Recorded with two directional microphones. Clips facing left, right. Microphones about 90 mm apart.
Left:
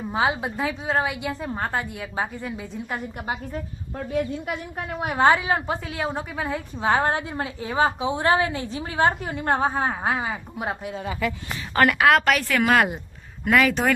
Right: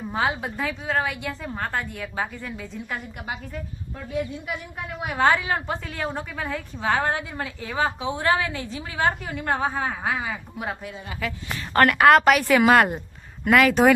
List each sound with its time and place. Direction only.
0.0 s a woman's voice: 15° left (ahead or behind)
3.2 s a woman's voice: 35° left (ahead or behind)
4.9 s a woman's voice: 30° left (ahead or behind)
11.7 s speech: centre (ahead or behind)
12.2 s a woman's voice: 15° right (ahead or behind)
12.6 s speech: centre (ahead or behind)